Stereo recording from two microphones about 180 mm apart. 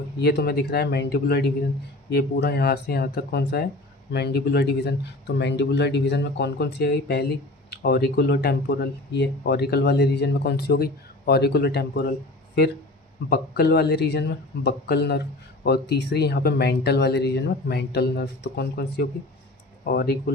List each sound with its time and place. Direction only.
0.2 s speech: 60° left (ahead or behind)
13.3 s speech: 65° left (ahead or behind)